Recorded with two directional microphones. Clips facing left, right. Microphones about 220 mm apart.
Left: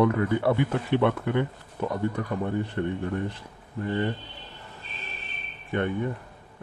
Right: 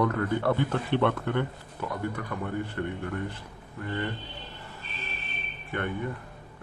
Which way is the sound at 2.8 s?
25° left (ahead or behind).